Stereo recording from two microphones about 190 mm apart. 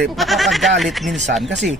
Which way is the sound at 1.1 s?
40° right (ahead or behind).